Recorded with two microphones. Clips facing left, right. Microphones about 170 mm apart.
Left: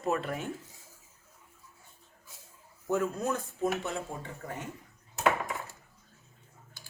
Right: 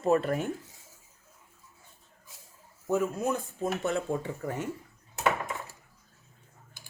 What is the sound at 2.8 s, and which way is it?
Speech, centre (ahead or behind).